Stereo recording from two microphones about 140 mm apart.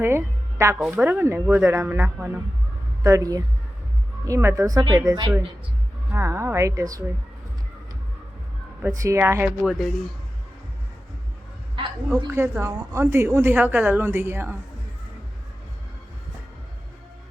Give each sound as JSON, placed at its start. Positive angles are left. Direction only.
{"t": 0.0, "sound": "music", "side_deg": -20}
{"t": 0.8, "sound": "a woman's voice", "side_deg": -10}
{"t": 6.1, "sound": "a woman's voice", "side_deg": -20}
{"t": 8.8, "sound": "a woman's voice", "side_deg": -20}
{"t": 9.6, "sound": "speech", "side_deg": -5}
{"t": 12.0, "sound": "a woman's voice", "side_deg": -15}